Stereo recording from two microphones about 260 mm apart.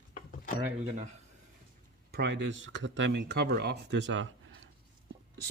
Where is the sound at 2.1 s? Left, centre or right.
Right.